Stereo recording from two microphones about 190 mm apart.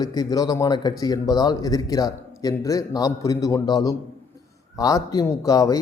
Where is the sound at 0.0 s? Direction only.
20° left (ahead or behind).